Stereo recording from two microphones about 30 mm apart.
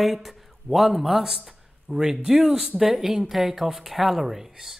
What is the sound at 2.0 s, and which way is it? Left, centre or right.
Speech, centre.